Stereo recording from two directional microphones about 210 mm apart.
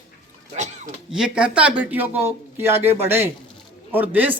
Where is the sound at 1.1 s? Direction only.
5° right (ahead or behind).